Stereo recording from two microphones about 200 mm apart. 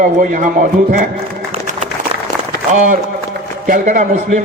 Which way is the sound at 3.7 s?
40° right (ahead or behind).